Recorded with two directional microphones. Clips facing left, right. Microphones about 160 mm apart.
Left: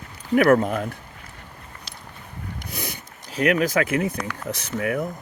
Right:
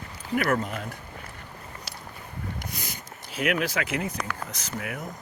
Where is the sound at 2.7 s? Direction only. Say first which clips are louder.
Left 6 dB; 60° left (ahead or behind).